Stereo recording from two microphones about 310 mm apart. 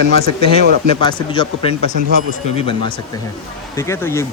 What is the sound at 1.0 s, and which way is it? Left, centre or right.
Speech, centre.